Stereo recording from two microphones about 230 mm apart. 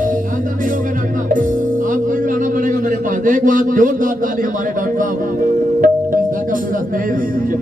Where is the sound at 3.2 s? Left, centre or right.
Right.